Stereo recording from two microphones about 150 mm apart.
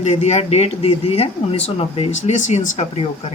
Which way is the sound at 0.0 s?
45° left (ahead or behind).